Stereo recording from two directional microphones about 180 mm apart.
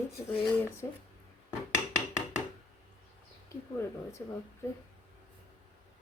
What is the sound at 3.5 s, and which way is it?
Speech, 15° left (ahead or behind).